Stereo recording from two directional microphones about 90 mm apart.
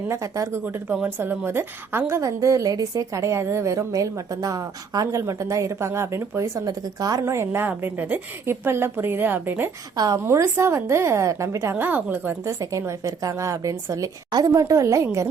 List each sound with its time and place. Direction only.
0.1 s a woman's voice: 35° right (ahead or behind)
0.6 s a woman's voice: 20° right (ahead or behind)
6.7 s a woman's voice: 45° right (ahead or behind)
7.3 s a woman's voice: 30° right (ahead or behind)
10.2 s a woman's voice: 35° right (ahead or behind)
11.7 s a woman's voice: 20° right (ahead or behind)
12.5 s a woman's voice: 35° right (ahead or behind)